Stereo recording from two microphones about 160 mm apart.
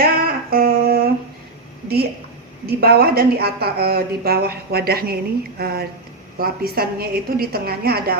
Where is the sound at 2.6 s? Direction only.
75° right (ahead or behind).